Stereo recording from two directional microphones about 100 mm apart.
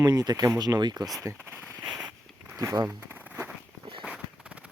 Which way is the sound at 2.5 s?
35° right (ahead or behind).